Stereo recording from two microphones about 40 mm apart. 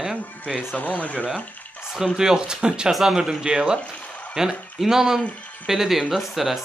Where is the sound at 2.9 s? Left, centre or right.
Centre.